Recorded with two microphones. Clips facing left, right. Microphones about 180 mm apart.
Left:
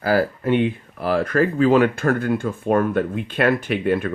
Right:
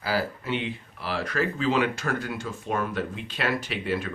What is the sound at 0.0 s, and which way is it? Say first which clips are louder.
Speech: left 9 dB; 50° left (ahead or behind).